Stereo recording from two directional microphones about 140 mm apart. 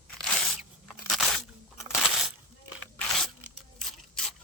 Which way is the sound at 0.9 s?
Centre (ahead or behind).